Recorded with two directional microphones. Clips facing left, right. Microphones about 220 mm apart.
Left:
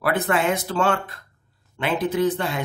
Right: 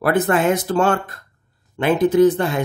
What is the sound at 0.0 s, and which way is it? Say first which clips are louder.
Speech: right 5 dB; 45° right (ahead or behind).